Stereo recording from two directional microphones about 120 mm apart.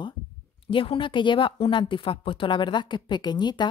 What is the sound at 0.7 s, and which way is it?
Speech, 45° left (ahead or behind).